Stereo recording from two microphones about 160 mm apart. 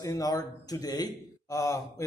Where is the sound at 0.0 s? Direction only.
20° left (ahead or behind).